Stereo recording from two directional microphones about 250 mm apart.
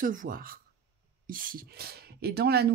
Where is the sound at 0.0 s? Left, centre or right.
Right.